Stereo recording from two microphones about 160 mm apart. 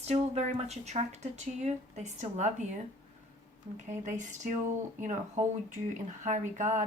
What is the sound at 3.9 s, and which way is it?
Speech, 50° right (ahead or behind).